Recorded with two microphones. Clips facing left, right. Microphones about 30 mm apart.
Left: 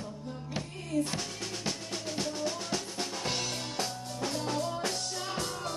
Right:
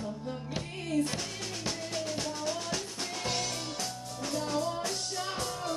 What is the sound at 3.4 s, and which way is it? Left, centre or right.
Music, left.